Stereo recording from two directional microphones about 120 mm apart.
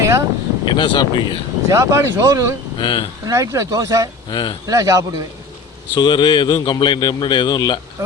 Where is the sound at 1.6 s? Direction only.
25° right (ahead or behind).